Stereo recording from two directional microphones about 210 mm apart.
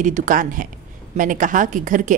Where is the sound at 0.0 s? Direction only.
35° right (ahead or behind).